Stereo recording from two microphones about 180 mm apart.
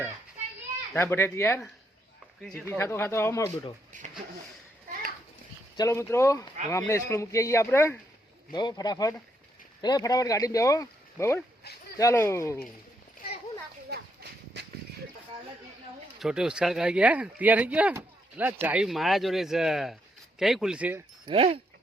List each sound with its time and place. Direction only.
0.9 s a man's voice: 15° left (ahead or behind)
3.9 s speech: 45° right (ahead or behind)
5.7 s a man's voice: 15° left (ahead or behind)
11.6 s a sound: 60° left (ahead or behind)
11.9 s a man's voice: 15° left (ahead or behind)
13.9 s horse: 65° right (ahead or behind)
16.1 s speech: centre (ahead or behind)
21.2 s speech: 30° right (ahead or behind)